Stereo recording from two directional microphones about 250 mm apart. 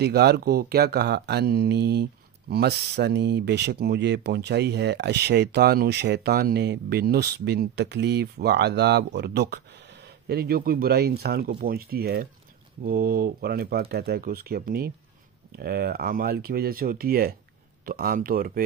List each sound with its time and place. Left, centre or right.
0.0 s speech: right